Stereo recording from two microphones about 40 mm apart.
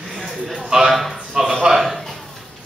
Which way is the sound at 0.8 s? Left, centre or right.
Centre.